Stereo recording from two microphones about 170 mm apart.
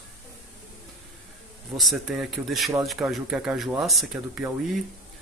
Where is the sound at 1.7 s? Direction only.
Centre (ahead or behind).